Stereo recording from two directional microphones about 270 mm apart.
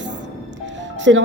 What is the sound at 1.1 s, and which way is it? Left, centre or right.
Speech, right.